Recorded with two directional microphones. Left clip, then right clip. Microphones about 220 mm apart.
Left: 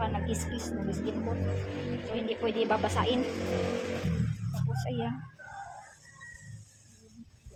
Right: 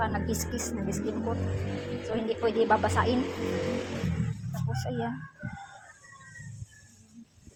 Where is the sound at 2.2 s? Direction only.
20° right (ahead or behind).